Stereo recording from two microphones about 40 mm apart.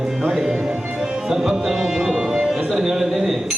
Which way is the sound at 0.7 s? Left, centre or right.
Right.